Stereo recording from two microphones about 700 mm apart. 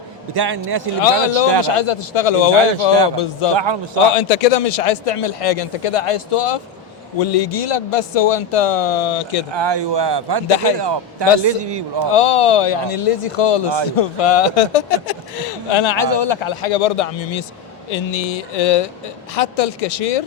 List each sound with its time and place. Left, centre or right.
0.3 s a man's voice: right
1.0 s a man's voice: left
3.5 s a man's voice: right
4.1 s a man's voice: left
9.5 s a man's voice: right
12.1 s a man's voice: left
15.7 s a man's voice: left